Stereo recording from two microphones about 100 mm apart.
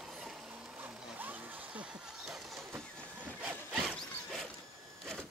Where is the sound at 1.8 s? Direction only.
5° right (ahead or behind).